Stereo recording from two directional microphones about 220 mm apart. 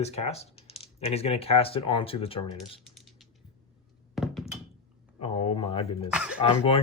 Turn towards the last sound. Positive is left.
turn(degrees=25)  # may be behind; listen again after turning